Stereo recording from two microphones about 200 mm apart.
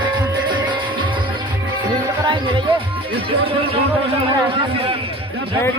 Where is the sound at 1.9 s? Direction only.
25° right (ahead or behind).